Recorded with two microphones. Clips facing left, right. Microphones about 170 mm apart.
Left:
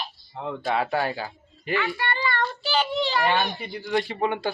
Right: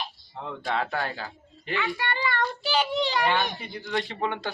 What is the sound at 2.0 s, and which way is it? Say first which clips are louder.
Child singing: left 1 dB; 15° right (ahead or behind).